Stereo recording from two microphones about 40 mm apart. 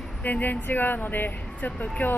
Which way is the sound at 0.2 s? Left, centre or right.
Left.